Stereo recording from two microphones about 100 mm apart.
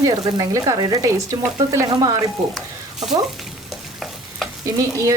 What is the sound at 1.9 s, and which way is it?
Speech, 40° right (ahead or behind).